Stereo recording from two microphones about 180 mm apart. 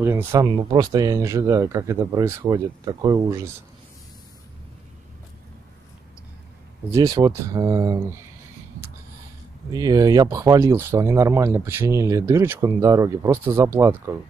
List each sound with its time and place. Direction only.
0.0 s speech: 15° right (ahead or behind)
6.9 s speech: 20° right (ahead or behind)
9.7 s speech: 20° right (ahead or behind)